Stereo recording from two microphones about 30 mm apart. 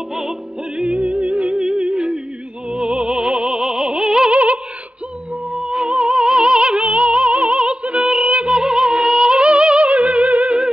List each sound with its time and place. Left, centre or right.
0.1 s music: centre
0.8 s music: right
1.6 s music: right
2.7 s opera: right
4.3 s music: right
5.6 s music: right
8.3 s music: right
8.5 s music: right
9.3 s music: right